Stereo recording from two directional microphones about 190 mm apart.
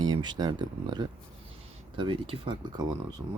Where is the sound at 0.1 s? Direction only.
25° right (ahead or behind).